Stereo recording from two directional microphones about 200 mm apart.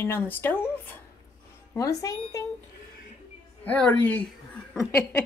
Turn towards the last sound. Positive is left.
turn(degrees=5)  # may be behind; listen again after turning